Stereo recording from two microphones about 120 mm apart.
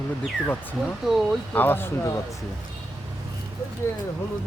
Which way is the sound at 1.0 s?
5° right (ahead or behind).